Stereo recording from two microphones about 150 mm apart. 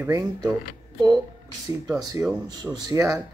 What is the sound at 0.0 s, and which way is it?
Speech, 20° right (ahead or behind).